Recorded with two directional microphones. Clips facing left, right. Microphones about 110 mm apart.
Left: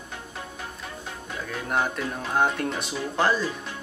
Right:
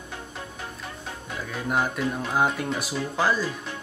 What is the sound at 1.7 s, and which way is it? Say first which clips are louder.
Speech: right 1 dB; 5° right (ahead or behind).